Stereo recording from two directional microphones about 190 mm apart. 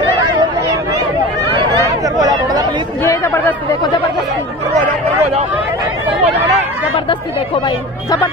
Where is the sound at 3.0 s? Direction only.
15° left (ahead or behind).